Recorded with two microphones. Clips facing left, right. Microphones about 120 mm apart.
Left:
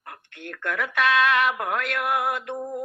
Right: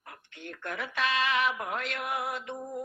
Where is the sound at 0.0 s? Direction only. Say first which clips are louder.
Left 5 dB; 60° left (ahead or behind).